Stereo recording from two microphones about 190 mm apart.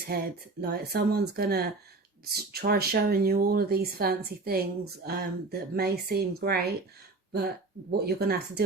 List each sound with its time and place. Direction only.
0.1 s speech: 55° right (ahead or behind)